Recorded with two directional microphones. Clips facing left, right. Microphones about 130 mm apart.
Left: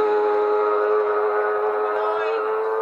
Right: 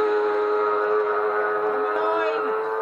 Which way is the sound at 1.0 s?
35° left (ahead or behind).